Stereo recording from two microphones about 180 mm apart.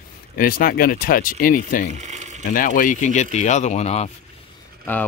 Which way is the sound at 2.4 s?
50° left (ahead or behind).